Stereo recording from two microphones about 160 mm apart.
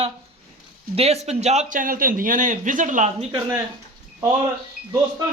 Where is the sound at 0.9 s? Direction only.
40° right (ahead or behind).